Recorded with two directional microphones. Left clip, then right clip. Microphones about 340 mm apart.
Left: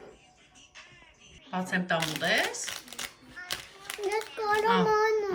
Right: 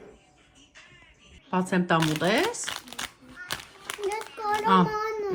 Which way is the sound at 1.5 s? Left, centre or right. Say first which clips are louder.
Right 4 dB; centre.